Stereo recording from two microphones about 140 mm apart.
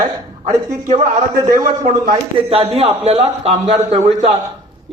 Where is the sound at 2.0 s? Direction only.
45° right (ahead or behind).